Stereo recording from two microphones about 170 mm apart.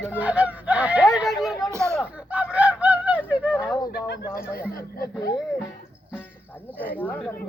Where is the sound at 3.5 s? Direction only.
10° left (ahead or behind).